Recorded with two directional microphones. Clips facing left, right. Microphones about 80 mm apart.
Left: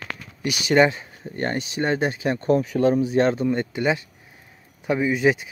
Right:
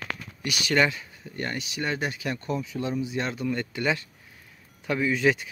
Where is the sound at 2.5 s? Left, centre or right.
Left; by 5.4 s centre.